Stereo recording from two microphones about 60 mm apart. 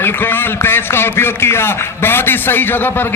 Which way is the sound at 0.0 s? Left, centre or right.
Left.